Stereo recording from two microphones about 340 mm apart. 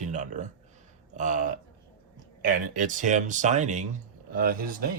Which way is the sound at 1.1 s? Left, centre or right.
Right.